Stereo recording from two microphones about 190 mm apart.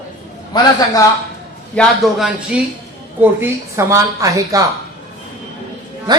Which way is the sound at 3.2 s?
15° right (ahead or behind).